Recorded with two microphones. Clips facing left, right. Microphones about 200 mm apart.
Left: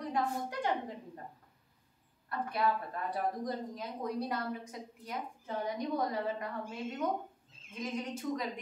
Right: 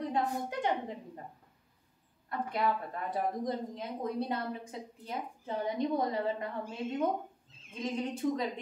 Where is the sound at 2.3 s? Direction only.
20° right (ahead or behind).